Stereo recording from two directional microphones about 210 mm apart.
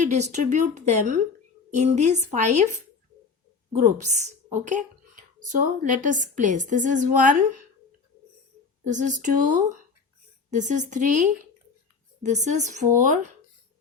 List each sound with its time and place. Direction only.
0.0 s a woman's voice: 35° right (ahead or behind)
3.7 s a woman's voice: 35° right (ahead or behind)
8.8 s a woman's voice: 35° right (ahead or behind)